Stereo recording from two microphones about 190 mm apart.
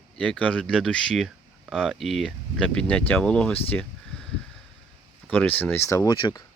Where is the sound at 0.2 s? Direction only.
5° left (ahead or behind).